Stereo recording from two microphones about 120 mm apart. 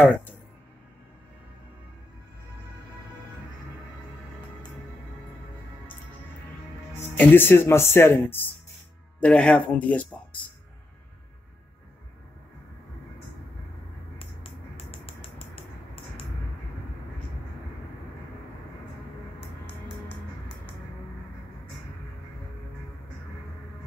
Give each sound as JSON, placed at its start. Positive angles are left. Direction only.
{"t": 7.0, "sound": "speech", "side_deg": 15}
{"t": 14.9, "sound": "finger snapping", "side_deg": 50}